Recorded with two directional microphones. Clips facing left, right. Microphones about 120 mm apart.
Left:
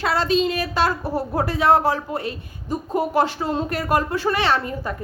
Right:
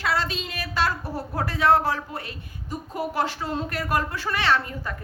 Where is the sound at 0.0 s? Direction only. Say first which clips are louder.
Left 7 dB; 25° left (ahead or behind).